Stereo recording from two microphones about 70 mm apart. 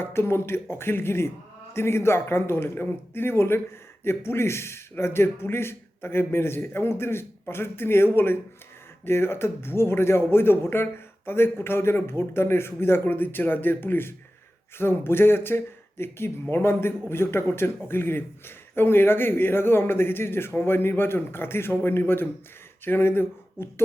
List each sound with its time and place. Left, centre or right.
0.0 s speech: left